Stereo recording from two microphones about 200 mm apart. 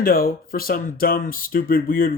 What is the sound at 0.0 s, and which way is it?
Speech, 50° left (ahead or behind).